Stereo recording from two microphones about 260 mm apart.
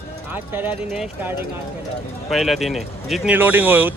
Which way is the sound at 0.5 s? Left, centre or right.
Centre.